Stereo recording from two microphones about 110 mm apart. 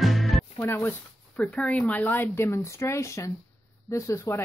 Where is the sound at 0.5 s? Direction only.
20° left (ahead or behind).